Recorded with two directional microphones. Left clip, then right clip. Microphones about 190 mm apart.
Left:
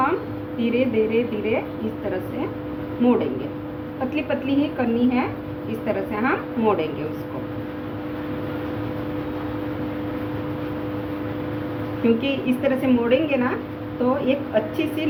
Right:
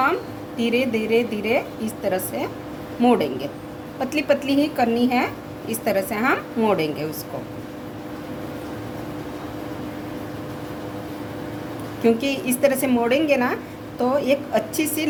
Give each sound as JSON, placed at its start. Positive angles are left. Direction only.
{"t": 0.6, "sound": "a woman's voice", "side_deg": -90}
{"t": 3.0, "sound": "a woman's voice", "side_deg": -90}
{"t": 12.0, "sound": "a woman's voice", "side_deg": -90}